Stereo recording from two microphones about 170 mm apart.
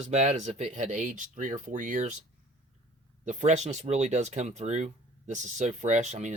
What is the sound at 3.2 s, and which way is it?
Speech, 45° right (ahead or behind).